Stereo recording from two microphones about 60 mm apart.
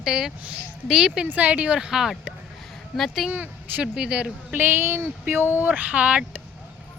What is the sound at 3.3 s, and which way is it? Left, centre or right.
Speech, right.